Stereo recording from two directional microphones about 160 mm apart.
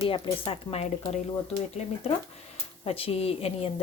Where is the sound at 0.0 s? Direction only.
30° left (ahead or behind).